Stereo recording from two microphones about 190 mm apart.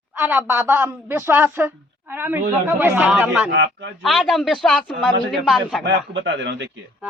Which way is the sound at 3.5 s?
70° right (ahead or behind).